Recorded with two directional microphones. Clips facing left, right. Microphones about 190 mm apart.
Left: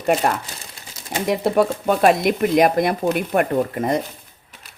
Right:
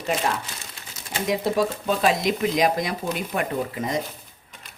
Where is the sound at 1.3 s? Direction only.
60° left (ahead or behind).